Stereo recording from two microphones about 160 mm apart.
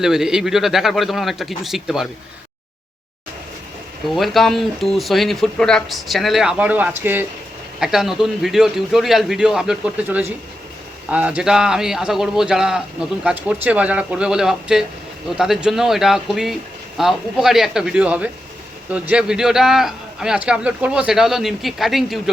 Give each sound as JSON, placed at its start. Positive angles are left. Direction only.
{"t": 0.0, "sound": "a man's voice", "side_deg": -5}
{"t": 4.1, "sound": "a man's voice", "side_deg": 0}